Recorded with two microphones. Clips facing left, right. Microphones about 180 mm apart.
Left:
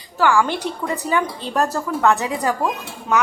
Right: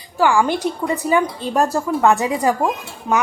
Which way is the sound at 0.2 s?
15° right (ahead or behind).